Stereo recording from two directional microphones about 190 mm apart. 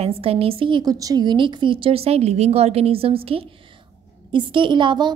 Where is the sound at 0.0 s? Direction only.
30° right (ahead or behind).